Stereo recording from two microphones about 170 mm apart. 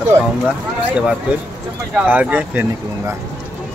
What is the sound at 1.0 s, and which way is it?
Speech, 5° right (ahead or behind).